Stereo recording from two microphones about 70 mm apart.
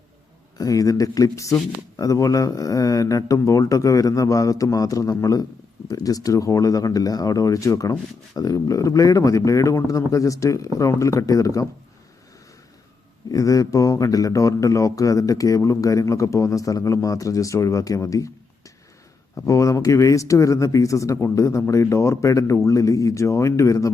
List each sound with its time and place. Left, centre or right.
0.6 s speech: left
13.3 s speech: left
19.4 s speech: left